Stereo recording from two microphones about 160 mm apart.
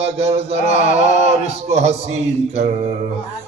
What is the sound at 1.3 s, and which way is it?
Mantra, 40° right (ahead or behind).